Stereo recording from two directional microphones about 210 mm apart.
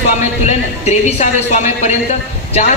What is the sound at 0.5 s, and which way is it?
A man's voice, 35° left (ahead or behind).